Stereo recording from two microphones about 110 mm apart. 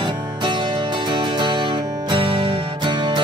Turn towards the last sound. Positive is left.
turn(degrees=-45)  # may be behind; listen again after turning